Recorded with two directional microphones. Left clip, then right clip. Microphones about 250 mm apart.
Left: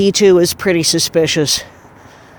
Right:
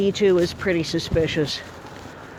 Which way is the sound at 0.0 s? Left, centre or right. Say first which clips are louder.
Left 8 dB; left.